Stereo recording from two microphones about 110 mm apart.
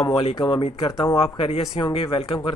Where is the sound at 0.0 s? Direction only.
55° left (ahead or behind).